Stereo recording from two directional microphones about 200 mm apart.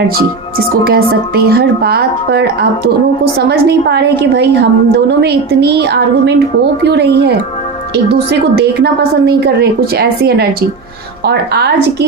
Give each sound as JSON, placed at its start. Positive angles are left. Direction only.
{"t": 0.9, "sound": "a woman's voice", "side_deg": -50}